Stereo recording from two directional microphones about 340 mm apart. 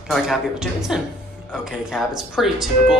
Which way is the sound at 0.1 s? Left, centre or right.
Centre.